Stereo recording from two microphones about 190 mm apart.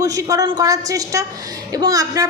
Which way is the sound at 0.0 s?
20° right (ahead or behind).